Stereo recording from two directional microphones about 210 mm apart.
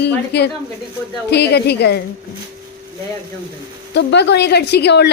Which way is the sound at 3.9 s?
55° left (ahead or behind).